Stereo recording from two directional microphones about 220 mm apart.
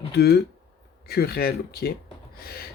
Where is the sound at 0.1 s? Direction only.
45° left (ahead or behind).